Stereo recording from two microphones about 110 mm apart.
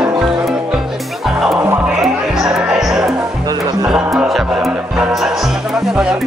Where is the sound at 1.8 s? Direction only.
5° right (ahead or behind).